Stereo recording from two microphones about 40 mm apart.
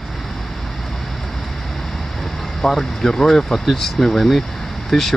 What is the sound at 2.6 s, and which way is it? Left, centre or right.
Speech, centre.